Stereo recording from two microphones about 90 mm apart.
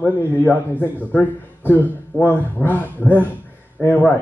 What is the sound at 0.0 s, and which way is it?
A man's voice, 20° left (ahead or behind).